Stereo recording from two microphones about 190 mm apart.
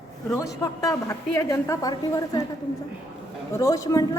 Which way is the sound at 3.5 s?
15° left (ahead or behind).